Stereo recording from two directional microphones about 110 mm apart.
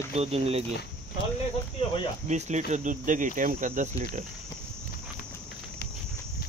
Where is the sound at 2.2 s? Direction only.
90° right.